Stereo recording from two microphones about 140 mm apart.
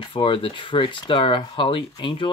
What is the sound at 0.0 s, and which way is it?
Speech, 40° left (ahead or behind).